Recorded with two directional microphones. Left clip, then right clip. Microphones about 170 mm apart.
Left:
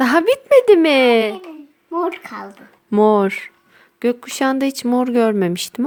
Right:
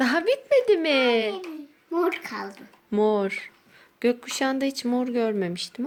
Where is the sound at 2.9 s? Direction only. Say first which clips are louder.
Left 9 dB; 35° left (ahead or behind).